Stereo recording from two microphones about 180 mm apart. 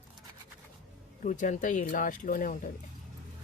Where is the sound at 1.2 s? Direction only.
45° left (ahead or behind).